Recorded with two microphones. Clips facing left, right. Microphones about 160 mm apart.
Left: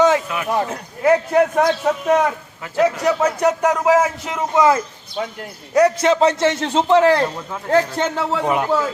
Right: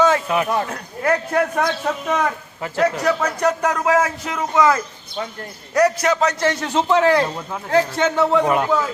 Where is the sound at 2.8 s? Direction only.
10° left (ahead or behind); by 7.0 s 30° left (ahead or behind).